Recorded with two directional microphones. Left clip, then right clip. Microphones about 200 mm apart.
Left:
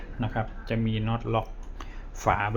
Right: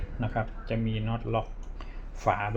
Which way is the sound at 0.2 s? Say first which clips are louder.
Left 1 dB; 5° left (ahead or behind).